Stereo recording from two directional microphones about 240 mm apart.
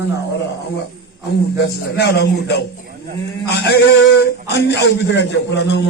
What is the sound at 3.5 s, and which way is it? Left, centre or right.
A man's voice, left.